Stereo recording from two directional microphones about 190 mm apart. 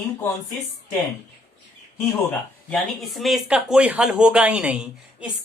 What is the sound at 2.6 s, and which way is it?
Speech, 5° left (ahead or behind).